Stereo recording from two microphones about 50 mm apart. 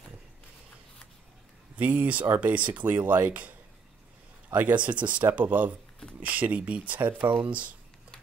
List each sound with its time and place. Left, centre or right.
1.8 s speech: right
4.5 s speech: right
4.8 s speech: right